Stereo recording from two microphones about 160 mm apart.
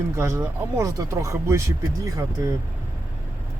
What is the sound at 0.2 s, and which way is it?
Speech, 15° right (ahead or behind).